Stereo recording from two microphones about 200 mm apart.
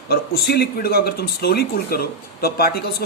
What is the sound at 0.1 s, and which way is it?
Speech, 55° left (ahead or behind).